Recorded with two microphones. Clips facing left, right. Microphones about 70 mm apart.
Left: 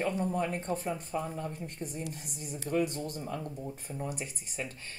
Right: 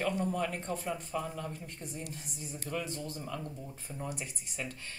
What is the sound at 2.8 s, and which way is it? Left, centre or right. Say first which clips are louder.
Speech: left 7 dB; left.